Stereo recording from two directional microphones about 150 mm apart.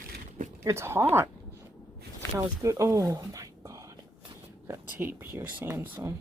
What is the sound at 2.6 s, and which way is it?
Speech, 20° right (ahead or behind).